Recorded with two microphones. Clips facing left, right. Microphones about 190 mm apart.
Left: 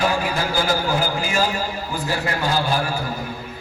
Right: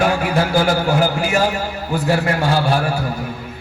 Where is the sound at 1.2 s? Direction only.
65° right (ahead or behind).